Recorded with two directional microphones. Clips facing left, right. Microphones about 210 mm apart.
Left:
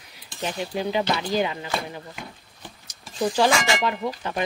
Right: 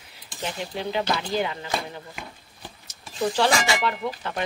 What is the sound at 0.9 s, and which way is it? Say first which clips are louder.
Speech: left 1 dB; 15° left (ahead or behind).